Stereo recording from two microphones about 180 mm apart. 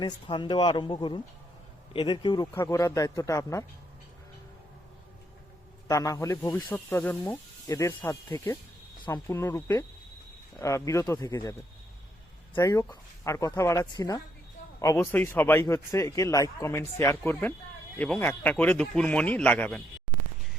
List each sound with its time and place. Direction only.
0.0 s a man's voice: 25° left (ahead or behind)
5.9 s a man's voice: 20° left (ahead or behind)
12.5 s a man's voice: 15° left (ahead or behind)